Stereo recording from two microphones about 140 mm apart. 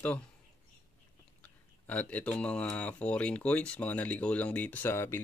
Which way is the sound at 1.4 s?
10° left (ahead or behind).